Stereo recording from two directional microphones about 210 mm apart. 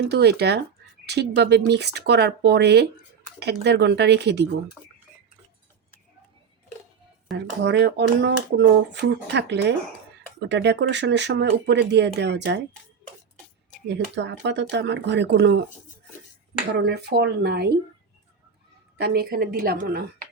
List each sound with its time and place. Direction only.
0.0 s speech: 50° right (ahead or behind)
7.3 s speech: 55° right (ahead or behind)
13.8 s speech: 55° right (ahead or behind)
16.7 s speech: 50° right (ahead or behind)
18.9 s speech: 50° right (ahead or behind)